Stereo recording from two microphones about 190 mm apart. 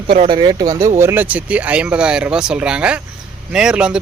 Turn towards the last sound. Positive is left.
turn(degrees=-5)  # may be behind; listen again after turning